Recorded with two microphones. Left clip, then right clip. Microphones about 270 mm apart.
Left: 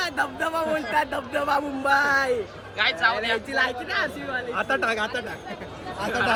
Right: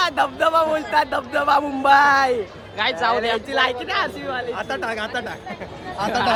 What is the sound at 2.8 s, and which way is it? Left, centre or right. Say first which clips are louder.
Speech: right 2 dB; centre.